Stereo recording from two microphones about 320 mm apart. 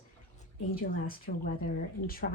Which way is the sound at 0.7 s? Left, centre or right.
Left.